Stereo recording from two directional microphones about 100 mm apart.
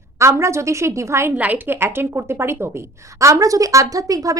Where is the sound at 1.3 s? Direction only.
15° right (ahead or behind).